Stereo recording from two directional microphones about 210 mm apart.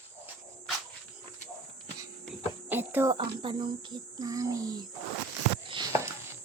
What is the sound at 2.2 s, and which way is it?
Cricket, 10° right (ahead or behind).